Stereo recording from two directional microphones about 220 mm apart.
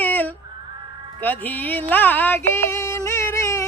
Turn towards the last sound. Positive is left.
turn(degrees=15)  # may be behind; listen again after turning